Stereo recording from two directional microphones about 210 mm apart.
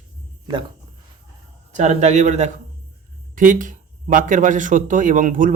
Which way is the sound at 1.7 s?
35° right (ahead or behind).